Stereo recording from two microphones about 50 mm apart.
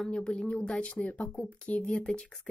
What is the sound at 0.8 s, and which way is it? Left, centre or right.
Speech, left.